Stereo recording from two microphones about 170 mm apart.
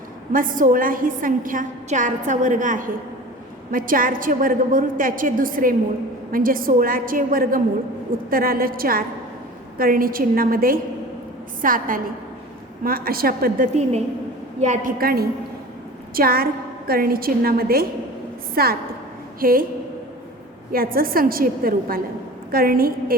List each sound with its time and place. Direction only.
0.3 s a woman's voice: 55° right (ahead or behind)
14.6 s a woman's voice: 45° right (ahead or behind)
20.7 s a woman's voice: 60° right (ahead or behind)